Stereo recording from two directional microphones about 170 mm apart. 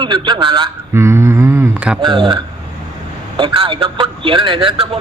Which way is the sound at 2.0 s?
25° right (ahead or behind).